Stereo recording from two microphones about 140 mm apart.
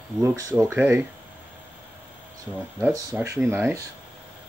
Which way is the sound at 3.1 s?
20° right (ahead or behind).